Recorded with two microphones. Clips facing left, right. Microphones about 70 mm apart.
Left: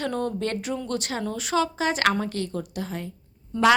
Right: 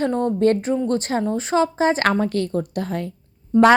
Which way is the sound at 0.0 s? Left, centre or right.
Right.